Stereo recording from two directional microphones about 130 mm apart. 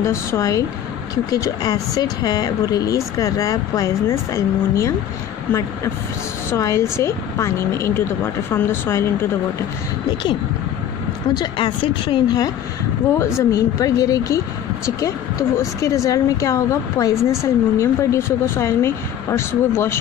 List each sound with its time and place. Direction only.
0.0 s a woman's voice: 20° left (ahead or behind)
6.5 s a woman's voice: 25° left (ahead or behind)
11.3 s speech: 40° left (ahead or behind)
13.5 s a woman's voice: 25° left (ahead or behind)